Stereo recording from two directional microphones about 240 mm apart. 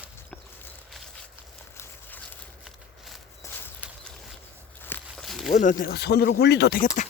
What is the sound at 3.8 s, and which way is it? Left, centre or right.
Clip-clop, centre.